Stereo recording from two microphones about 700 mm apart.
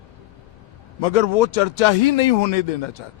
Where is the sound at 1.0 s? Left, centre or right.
Left.